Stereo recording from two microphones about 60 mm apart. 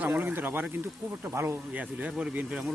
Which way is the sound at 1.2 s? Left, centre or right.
Right.